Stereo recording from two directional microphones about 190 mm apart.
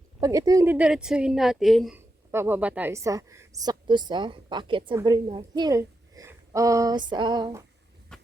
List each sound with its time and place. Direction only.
0.2 s a woman's voice: 15° right (ahead or behind); by 2.0 s centre (ahead or behind)
2.3 s a woman's voice: 10° right (ahead or behind)
8.1 s a sound: 5° left (ahead or behind)